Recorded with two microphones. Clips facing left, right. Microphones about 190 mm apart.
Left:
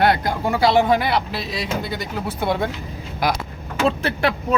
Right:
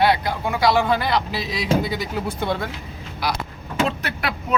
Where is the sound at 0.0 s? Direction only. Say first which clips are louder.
Left 1 dB; 50° left (ahead or behind).